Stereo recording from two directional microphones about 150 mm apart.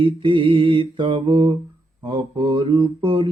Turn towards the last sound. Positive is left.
turn(degrees=-35)  # may be behind; listen again after turning